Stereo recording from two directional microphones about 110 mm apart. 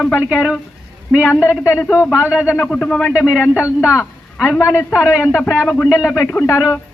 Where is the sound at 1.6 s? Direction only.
25° left (ahead or behind).